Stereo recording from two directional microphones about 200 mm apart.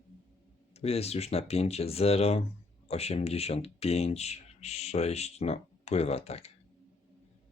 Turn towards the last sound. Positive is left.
turn(degrees=30)  # may be behind; listen again after turning